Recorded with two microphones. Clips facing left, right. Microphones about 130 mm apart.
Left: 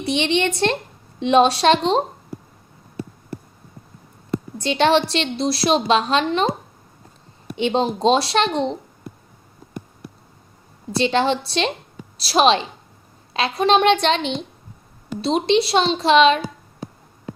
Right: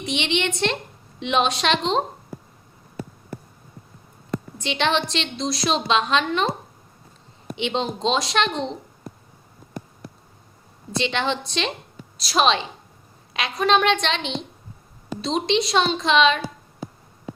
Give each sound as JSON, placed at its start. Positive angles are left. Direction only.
{"t": 0.0, "sound": "a woman's voice", "side_deg": 35}
{"t": 4.5, "sound": "a woman's voice", "side_deg": 35}
{"t": 7.5, "sound": "a woman's voice", "side_deg": 40}
{"t": 10.9, "sound": "a woman's voice", "side_deg": 35}
{"t": 15.4, "sound": "a woman's voice", "side_deg": 35}